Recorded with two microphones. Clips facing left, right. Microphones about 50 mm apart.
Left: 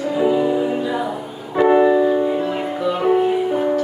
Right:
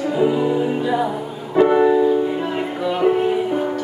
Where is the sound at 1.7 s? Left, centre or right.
Centre.